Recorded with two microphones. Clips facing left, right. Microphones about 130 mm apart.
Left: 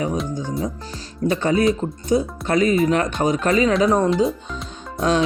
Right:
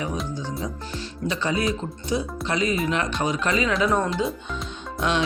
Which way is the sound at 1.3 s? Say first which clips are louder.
Left 7 dB; 50° left (ahead or behind).